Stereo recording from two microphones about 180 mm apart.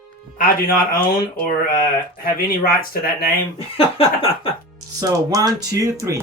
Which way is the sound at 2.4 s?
55° left (ahead or behind).